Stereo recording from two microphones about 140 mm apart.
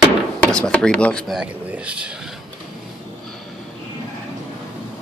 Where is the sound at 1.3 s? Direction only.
5° right (ahead or behind).